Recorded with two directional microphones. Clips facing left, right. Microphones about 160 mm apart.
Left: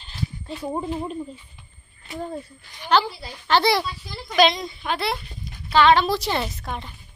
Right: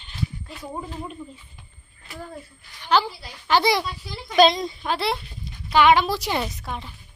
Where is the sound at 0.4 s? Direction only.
30° left (ahead or behind).